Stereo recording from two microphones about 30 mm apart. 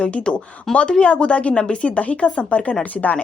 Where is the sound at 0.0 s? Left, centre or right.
Left.